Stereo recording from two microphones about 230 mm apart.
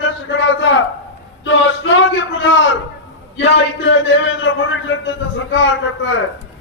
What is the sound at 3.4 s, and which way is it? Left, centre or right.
A man's voice, left.